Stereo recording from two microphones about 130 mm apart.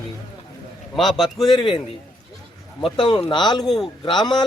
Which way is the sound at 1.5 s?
40° left (ahead or behind).